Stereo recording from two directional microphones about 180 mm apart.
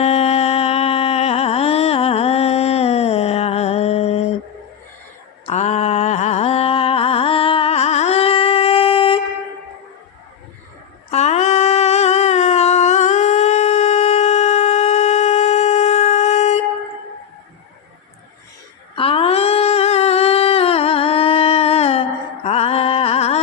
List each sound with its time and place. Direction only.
0.0 s music: 35° left (ahead or behind)
5.5 s a sound: 40° left (ahead or behind)
11.1 s humming: 40° left (ahead or behind)
18.9 s humming: 30° left (ahead or behind)
22.4 s music: 35° left (ahead or behind)